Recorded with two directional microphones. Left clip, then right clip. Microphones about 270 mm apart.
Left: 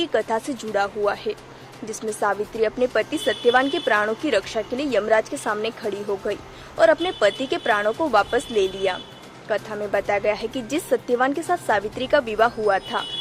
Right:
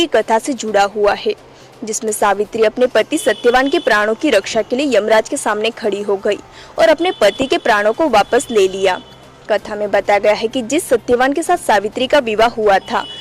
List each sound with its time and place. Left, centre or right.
0.0 s speech: right